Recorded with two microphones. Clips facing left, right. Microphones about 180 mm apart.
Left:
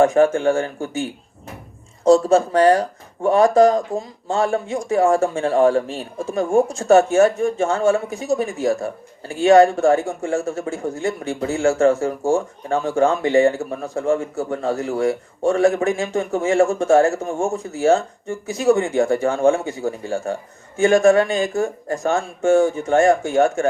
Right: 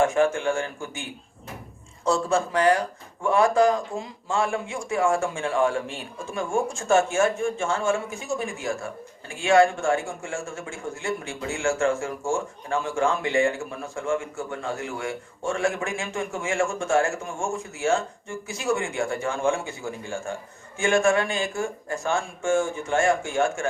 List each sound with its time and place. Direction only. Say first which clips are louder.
0.0 s a man's voice: left 7 dB; 40° left (ahead or behind)
2.0 s a man's voice: left 10 dB; 40° left (ahead or behind)